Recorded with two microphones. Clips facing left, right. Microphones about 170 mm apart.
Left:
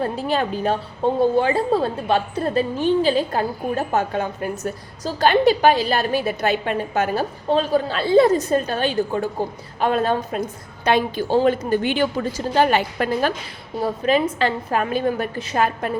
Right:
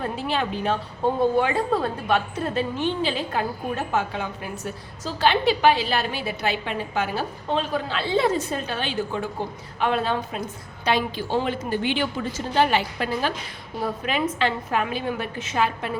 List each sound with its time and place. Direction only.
0.0 s a woman's voice: 40° left (ahead or behind)
13.8 s a woman's voice: 35° left (ahead or behind)